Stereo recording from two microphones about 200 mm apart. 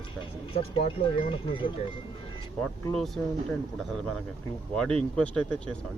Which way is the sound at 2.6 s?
5° left (ahead or behind).